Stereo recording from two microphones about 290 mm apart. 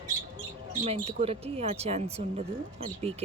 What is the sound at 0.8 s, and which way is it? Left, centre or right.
Speech, right.